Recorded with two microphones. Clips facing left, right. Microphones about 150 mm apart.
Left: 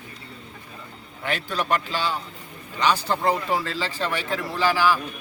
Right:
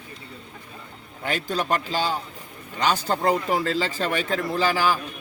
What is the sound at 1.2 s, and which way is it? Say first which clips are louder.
A man's voice: right 1 dB; 40° right (ahead or behind).